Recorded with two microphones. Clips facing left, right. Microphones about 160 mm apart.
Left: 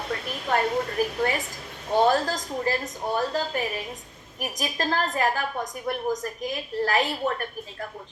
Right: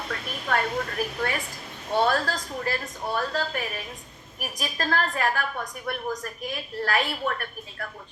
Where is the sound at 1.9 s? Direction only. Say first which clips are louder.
Left 3 dB; 20° left (ahead or behind).